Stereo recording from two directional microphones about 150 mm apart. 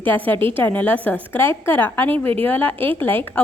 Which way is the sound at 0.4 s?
10° left (ahead or behind).